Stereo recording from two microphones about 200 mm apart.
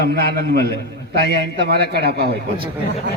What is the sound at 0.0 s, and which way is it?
A man's voice, 50° right (ahead or behind).